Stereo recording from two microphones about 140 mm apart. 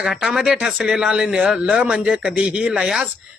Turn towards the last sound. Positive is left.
turn(degrees=-5)  # may be behind; listen again after turning